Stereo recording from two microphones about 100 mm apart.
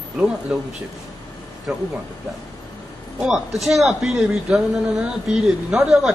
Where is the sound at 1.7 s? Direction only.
5° right (ahead or behind).